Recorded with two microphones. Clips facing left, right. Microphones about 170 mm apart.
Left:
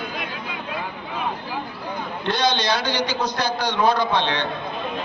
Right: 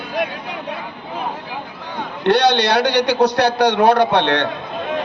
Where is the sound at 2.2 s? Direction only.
70° right (ahead or behind).